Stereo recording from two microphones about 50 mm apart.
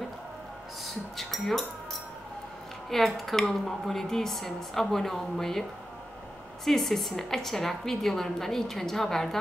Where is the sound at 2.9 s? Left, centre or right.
Centre.